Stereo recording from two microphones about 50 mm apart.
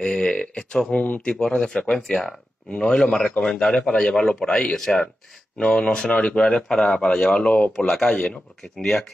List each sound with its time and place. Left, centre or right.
0.0 s speech: centre
3.3 s speech: left
4.7 s speech: centre
5.6 s speech: centre
6.7 s speech: centre
7.0 s speech: centre
7.7 s speech: centre